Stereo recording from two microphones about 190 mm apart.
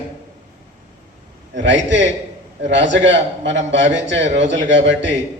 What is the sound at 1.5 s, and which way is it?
A man's voice, 70° right (ahead or behind).